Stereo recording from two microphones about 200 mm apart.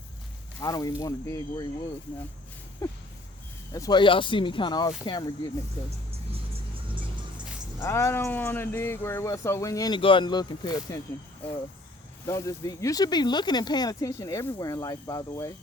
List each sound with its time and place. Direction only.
0.6 s speech: 20° left (ahead or behind)
3.7 s speech: 20° left (ahead or behind)
7.8 s speech: 15° left (ahead or behind)
12.2 s speech: 15° left (ahead or behind)